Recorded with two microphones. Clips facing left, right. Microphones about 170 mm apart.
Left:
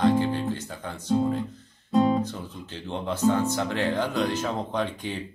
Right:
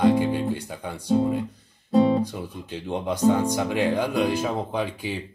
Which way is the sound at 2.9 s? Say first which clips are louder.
Right 3 dB; 15° right (ahead or behind).